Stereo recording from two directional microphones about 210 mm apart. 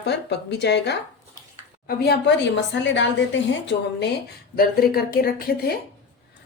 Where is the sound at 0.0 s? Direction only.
55° left (ahead or behind).